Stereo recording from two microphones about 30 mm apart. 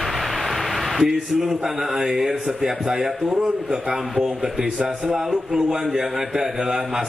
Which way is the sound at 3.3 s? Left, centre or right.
Right.